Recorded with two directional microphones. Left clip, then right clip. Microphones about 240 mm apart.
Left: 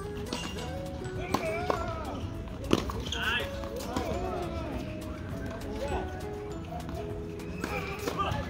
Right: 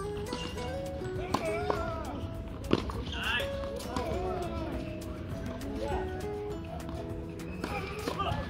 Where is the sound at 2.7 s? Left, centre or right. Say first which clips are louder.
Left 2 dB; left.